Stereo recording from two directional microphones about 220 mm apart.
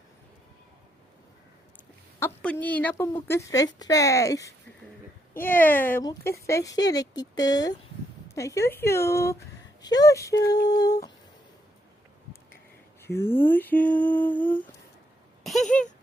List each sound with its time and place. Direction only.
2.1 s speech: 10° left (ahead or behind)
13.0 s speech: 10° left (ahead or behind)
15.4 s a sound: centre (ahead or behind)